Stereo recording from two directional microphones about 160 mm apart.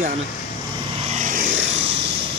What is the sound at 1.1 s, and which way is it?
Vehicle, 50° right (ahead or behind).